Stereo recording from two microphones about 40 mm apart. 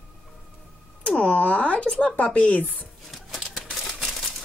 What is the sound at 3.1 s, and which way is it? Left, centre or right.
Typewriter, centre.